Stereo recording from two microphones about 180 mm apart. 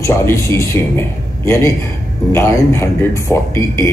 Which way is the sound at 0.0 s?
15° left (ahead or behind).